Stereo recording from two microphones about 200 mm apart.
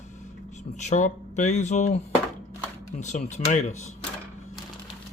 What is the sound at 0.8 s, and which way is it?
Speech, 35° left (ahead or behind).